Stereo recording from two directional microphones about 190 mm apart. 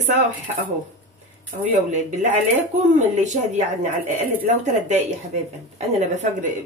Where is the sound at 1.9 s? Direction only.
40° right (ahead or behind).